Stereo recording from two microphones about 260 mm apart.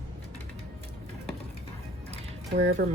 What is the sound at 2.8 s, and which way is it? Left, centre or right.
Speech, right.